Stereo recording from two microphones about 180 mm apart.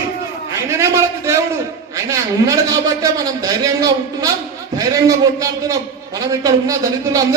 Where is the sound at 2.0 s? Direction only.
20° right (ahead or behind).